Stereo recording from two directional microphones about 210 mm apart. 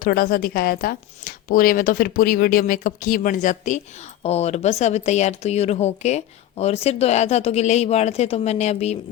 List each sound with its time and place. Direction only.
0.0 s a woman's voice: 45° left (ahead or behind)